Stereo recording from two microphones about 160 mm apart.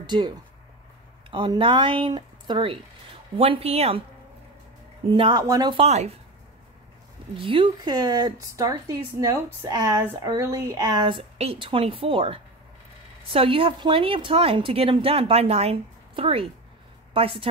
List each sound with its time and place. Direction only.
0.0 s a woman's voice: 25° right (ahead or behind)
5.1 s a woman's voice: 30° right (ahead or behind)
5.8 s a woman's voice: 40° right (ahead or behind)
7.3 s a woman's voice: 35° right (ahead or behind)